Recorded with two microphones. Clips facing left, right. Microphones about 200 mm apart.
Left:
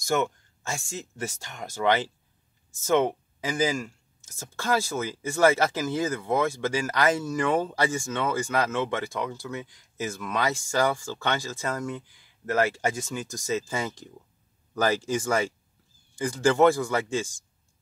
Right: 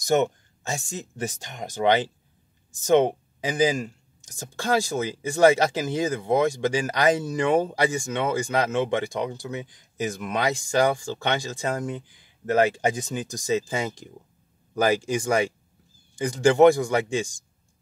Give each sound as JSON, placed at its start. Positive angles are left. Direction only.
{"t": 0.0, "sound": "speech", "side_deg": -20}